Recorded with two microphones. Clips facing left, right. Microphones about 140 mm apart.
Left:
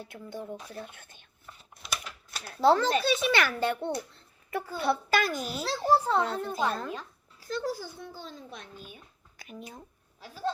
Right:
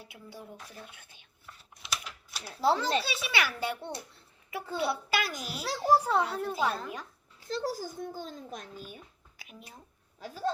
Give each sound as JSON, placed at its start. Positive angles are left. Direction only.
{"t": 0.0, "sound": "a child's voice", "side_deg": -5}
{"t": 1.8, "sound": "typing", "side_deg": -5}
{"t": 3.0, "sound": "a child's voice", "side_deg": -5}
{"t": 4.8, "sound": "a child's voice", "side_deg": -5}
{"t": 6.8, "sound": "a child's voice", "side_deg": -20}
{"t": 7.7, "sound": "a child's voice", "side_deg": -45}
{"t": 9.4, "sound": "a sound", "side_deg": -5}
{"t": 10.2, "sound": "a child's voice", "side_deg": -45}